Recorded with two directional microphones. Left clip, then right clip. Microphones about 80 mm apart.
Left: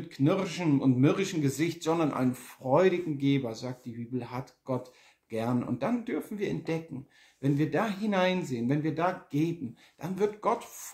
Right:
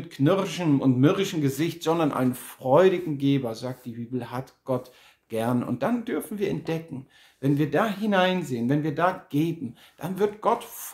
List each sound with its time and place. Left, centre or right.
0.1 s speech: right